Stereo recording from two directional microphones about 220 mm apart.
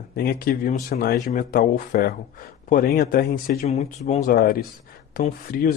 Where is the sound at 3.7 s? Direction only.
30° left (ahead or behind).